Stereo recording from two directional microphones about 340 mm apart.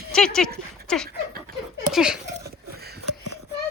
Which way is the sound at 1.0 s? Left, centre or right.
Right.